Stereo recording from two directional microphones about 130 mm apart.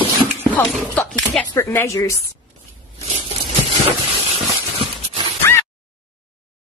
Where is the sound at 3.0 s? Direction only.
50° right (ahead or behind).